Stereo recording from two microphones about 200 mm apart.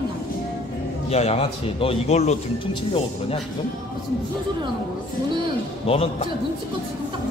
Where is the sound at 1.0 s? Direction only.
30° left (ahead or behind).